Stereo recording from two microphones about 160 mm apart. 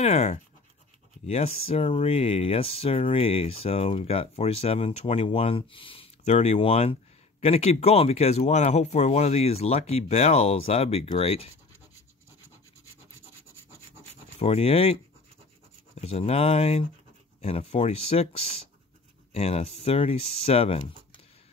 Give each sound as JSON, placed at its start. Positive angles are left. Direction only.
{"t": 0.0, "sound": "speech", "side_deg": 45}
{"t": 14.4, "sound": "speech", "side_deg": 40}